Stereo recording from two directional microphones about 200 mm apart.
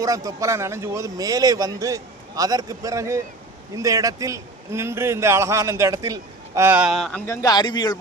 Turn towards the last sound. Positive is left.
turn(degrees=20)  # may be behind; listen again after turning